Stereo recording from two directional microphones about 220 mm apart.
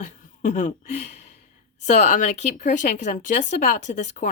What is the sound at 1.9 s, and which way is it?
Speech, 35° left (ahead or behind).